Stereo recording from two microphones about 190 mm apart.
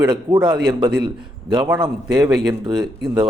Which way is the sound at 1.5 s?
20° right (ahead or behind).